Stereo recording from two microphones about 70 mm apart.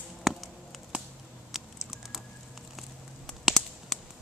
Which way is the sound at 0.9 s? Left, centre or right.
Centre.